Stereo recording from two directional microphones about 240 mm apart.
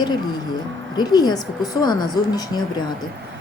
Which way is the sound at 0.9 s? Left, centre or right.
Centre.